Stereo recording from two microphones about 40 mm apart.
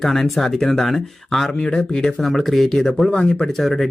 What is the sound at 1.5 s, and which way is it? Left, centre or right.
Speech, left.